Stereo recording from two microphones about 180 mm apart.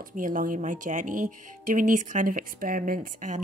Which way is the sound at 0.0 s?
45° right (ahead or behind).